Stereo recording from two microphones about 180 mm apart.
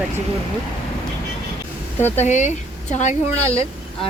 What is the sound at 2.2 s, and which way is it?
A woman's voice, 40° left (ahead or behind).